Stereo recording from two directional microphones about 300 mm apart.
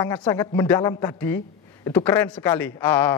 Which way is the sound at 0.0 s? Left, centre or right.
Centre.